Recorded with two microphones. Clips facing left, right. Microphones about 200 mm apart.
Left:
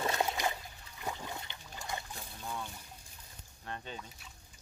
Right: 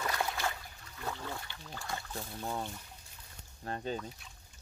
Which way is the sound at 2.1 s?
40° right (ahead or behind).